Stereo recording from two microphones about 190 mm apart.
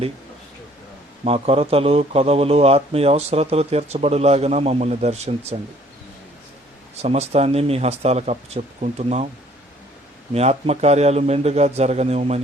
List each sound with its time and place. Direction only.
1.2 s a man's voice: 30° right (ahead or behind)
6.9 s a man's voice: 35° right (ahead or behind)
10.3 s a man's voice: 35° right (ahead or behind)